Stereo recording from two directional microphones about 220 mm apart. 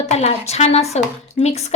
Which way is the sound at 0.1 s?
30° left (ahead or behind).